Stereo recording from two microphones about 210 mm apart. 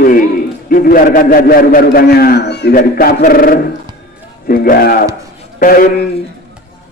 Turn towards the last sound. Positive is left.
turn(degrees=45)  # may be behind; listen again after turning